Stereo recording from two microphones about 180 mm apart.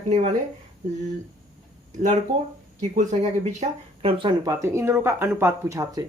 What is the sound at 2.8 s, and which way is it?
Speech, 40° right (ahead or behind).